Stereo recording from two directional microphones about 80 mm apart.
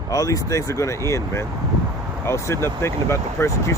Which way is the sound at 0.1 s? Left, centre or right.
Left.